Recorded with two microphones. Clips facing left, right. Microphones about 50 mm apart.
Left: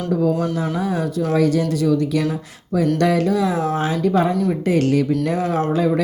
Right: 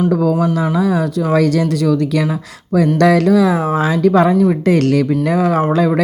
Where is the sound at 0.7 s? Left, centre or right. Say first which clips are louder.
Right 6 dB; right.